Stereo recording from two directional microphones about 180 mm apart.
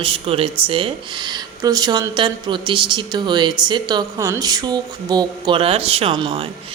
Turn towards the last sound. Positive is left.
turn(degrees=-30)  # may be behind; listen again after turning